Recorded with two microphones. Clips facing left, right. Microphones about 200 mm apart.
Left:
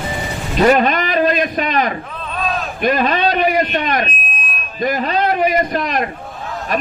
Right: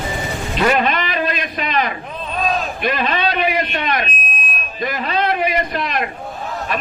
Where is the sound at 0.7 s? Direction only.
40° left (ahead or behind).